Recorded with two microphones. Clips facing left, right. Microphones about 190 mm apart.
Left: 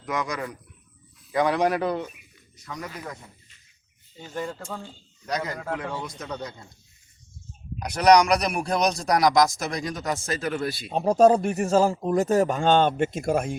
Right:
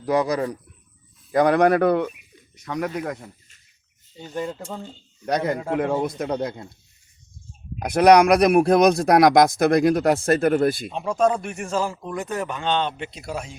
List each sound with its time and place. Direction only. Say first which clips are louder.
0.0 s speech: right 8 dB; 35° right (ahead or behind)
1.3 s speech: right 6 dB; 50° right (ahead or behind); by 3.2 s 65° right (ahead or behind)
4.4 s speech: right 3 dB; 20° right (ahead or behind)
5.7 s speech: right 9 dB; 55° right (ahead or behind)
7.8 s speech: right 4 dB; 55° right (ahead or behind)
10.9 s speech: left 4 dB; 35° left (ahead or behind)